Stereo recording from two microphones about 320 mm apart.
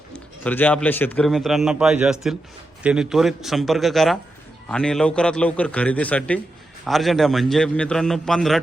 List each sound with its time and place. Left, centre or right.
0.4 s a man's voice: centre